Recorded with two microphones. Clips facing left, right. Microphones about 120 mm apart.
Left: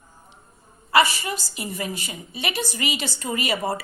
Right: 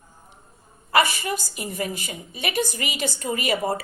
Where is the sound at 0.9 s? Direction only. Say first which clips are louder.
Left 1 dB; 50° right (ahead or behind).